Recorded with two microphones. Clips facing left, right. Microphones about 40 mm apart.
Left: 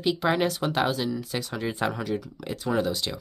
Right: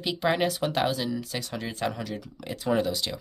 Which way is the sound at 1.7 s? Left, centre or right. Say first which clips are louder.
Left 3 dB; centre.